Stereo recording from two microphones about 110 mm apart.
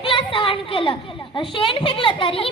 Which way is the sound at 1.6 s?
50° left (ahead or behind).